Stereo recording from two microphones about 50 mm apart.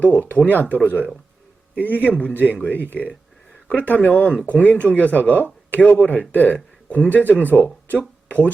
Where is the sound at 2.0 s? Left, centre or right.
Left.